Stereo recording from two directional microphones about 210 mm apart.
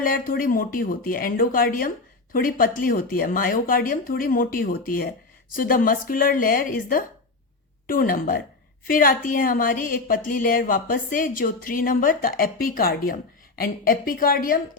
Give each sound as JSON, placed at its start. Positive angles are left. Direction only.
{"t": 0.0, "sound": "a woman's voice", "side_deg": 45}